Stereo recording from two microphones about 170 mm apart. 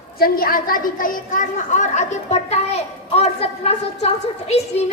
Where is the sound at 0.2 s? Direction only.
60° left (ahead or behind).